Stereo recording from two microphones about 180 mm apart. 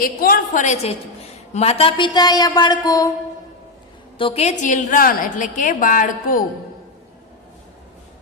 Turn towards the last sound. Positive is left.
turn(degrees=50)  # may be behind; listen again after turning